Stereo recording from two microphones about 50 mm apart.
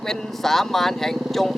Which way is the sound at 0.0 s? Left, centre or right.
Centre.